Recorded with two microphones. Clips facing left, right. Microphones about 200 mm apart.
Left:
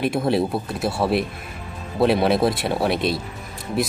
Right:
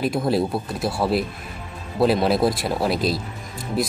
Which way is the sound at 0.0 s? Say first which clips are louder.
Left 1 dB; centre (ahead or behind).